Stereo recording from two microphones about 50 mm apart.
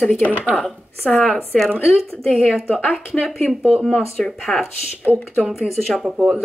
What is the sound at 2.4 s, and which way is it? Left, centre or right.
A woman's voice, centre.